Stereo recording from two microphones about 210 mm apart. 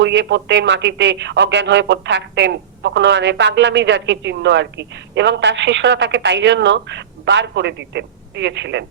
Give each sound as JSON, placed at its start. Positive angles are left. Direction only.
{"t": 0.0, "sound": "speech", "side_deg": -60}